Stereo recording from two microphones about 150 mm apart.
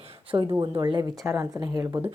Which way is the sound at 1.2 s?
20° right (ahead or behind).